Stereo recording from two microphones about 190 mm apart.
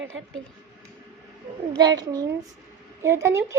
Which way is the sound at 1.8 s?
20° right (ahead or behind).